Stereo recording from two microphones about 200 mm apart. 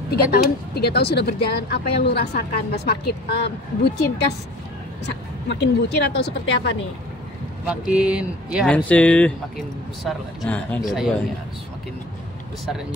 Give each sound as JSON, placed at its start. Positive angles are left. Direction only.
{"t": 0.1, "sound": "speech", "side_deg": 55}
{"t": 7.6, "sound": "speech", "side_deg": -5}
{"t": 8.7, "sound": "speech", "side_deg": 5}